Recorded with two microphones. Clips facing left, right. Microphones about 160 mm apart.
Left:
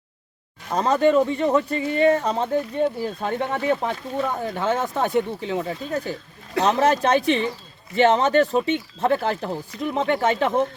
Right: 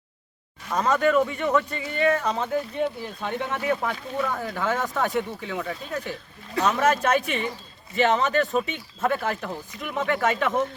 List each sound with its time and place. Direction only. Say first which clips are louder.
0.7 s speech: left 3 dB; 30° left (ahead or behind)